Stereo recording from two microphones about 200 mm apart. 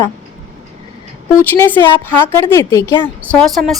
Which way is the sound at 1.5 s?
10° left (ahead or behind).